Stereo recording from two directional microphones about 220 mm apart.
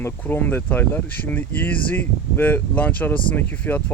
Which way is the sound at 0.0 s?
10° left (ahead or behind).